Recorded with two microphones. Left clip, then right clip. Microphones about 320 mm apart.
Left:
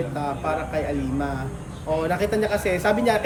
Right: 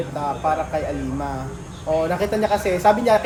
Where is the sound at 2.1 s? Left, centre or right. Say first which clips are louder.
Right 2 dB; centre.